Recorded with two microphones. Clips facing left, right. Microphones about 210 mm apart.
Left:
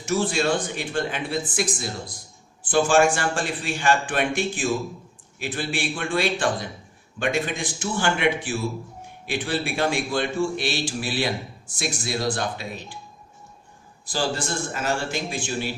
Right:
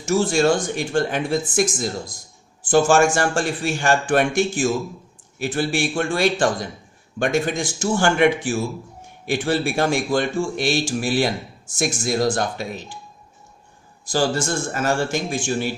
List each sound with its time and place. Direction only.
0.0 s a man's voice: 45° right (ahead or behind)
14.0 s a man's voice: 45° right (ahead or behind)